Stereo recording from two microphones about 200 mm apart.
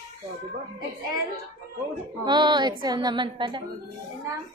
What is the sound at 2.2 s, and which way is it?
A woman's voice, 20° right (ahead or behind).